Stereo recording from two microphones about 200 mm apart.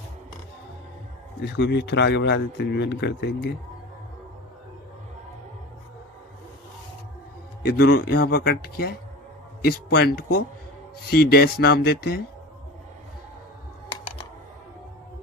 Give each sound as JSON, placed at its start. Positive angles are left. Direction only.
{"t": 1.5, "sound": "speech", "side_deg": 60}
{"t": 7.6, "sound": "speech", "side_deg": 50}
{"t": 13.9, "sound": "computer keyboard", "side_deg": 25}